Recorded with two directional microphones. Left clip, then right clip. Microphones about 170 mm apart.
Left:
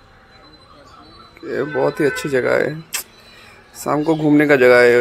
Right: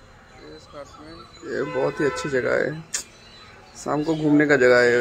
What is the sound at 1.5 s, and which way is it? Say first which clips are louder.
Speech: left 5 dB; 15° left (ahead or behind).